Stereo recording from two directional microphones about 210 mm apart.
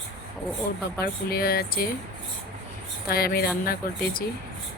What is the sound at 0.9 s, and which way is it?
Speech, 45° left (ahead or behind).